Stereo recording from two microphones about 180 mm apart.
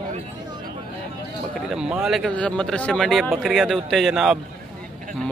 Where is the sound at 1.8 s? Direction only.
5° right (ahead or behind).